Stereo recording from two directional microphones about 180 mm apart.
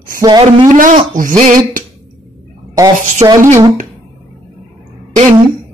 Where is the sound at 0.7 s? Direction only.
45° right (ahead or behind).